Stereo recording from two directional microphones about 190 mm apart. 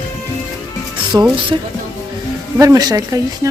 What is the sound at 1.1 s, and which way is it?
Speech, 15° right (ahead or behind).